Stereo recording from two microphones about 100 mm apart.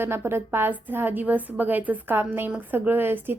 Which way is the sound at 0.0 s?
25° right (ahead or behind).